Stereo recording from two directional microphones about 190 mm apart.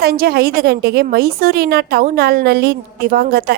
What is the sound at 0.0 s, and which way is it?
A woman's voice, 55° right (ahead or behind).